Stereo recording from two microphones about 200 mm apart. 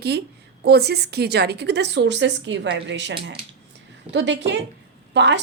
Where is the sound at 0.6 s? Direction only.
55° right (ahead or behind).